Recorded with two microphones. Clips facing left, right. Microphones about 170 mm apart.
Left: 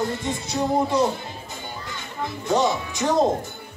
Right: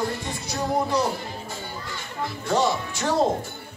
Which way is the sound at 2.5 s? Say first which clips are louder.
Left 2 dB; 15° left (ahead or behind).